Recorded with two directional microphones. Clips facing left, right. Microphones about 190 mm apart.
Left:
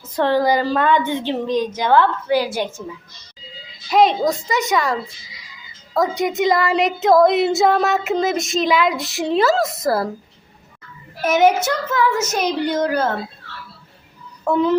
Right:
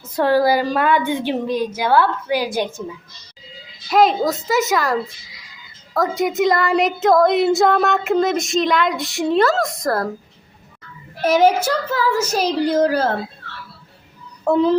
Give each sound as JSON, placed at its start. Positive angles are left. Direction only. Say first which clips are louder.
{"t": 0.0, "sound": "a woman's voice", "louder": "right 1 dB", "side_deg": -10}
{"t": 3.8, "sound": "speech", "louder": "even", "side_deg": 0}
{"t": 11.2, "sound": "a woman's voice", "louder": "right 1 dB", "side_deg": -30}
{"t": 14.4, "sound": "a woman's voice", "louder": "right 2 dB", "side_deg": -30}